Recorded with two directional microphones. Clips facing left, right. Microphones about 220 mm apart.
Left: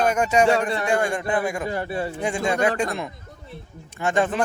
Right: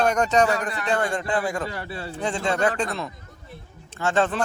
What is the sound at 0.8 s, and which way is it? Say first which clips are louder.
Speech: left 2 dB; 15° left (ahead or behind).